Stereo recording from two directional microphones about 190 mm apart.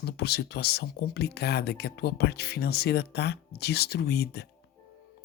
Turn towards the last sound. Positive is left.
turn(degrees=60)  # may be behind; listen again after turning